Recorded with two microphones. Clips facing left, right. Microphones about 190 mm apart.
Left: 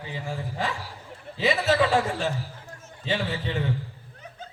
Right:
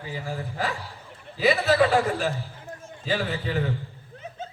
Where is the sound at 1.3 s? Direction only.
25° left (ahead or behind).